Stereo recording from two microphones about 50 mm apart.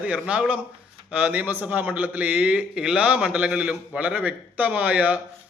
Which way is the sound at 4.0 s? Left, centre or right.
Right.